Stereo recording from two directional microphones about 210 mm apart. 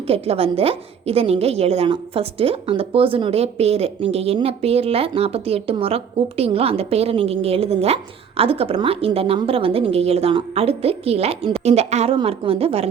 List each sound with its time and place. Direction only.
0.1 s a woman's voice: 30° right (ahead or behind)